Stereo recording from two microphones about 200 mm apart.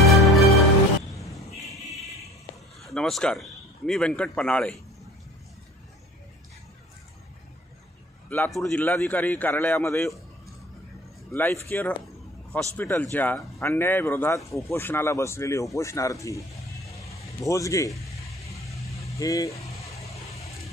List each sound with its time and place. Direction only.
0.0 s music: centre (ahead or behind)
1.6 s a sound: centre (ahead or behind)
2.8 s speech: centre (ahead or behind)
8.3 s speech: 5° left (ahead or behind)
11.3 s speech: 10° left (ahead or behind)
19.1 s speech: 15° left (ahead or behind)
20.0 s vehicle: 30° left (ahead or behind)